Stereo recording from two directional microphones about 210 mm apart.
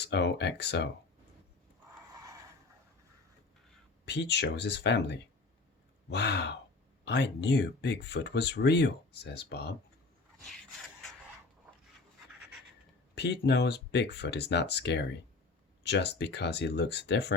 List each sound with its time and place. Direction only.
0.0 s speech: 55° left (ahead or behind)
4.0 s speech: 55° left (ahead or behind)
13.1 s speech: 55° left (ahead or behind)